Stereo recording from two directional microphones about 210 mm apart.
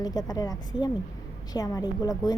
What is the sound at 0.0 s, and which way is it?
A woman's voice, 20° left (ahead or behind).